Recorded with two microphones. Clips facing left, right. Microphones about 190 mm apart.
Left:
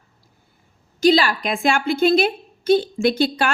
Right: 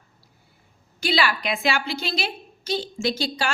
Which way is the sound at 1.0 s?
40° left (ahead or behind).